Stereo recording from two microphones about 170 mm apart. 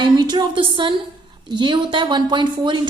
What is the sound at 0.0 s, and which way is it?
A woman's voice, 25° right (ahead or behind).